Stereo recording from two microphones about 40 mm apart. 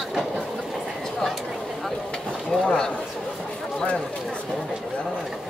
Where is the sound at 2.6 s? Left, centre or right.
Centre.